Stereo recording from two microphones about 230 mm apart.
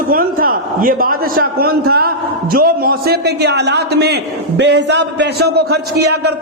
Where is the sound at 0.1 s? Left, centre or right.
Right.